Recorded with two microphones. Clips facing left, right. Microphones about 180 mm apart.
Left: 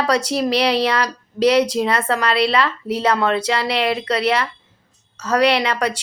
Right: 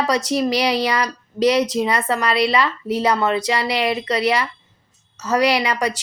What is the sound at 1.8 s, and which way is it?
A woman's voice, centre (ahead or behind).